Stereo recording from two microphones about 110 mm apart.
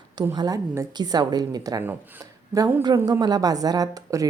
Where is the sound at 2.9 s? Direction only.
40° right (ahead or behind).